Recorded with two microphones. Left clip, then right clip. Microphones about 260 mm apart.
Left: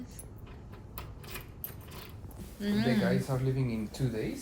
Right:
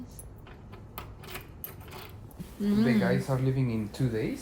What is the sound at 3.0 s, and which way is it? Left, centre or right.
Speech, right.